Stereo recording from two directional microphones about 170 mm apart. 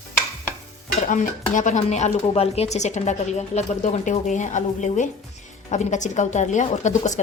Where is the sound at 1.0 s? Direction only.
50° left (ahead or behind).